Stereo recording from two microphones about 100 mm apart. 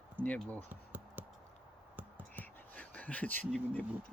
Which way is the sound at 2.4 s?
15° left (ahead or behind).